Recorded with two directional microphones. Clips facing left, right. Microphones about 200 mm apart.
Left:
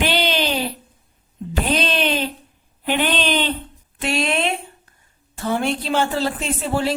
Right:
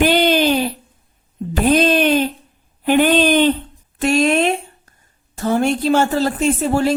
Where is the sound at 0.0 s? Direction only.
50° right (ahead or behind).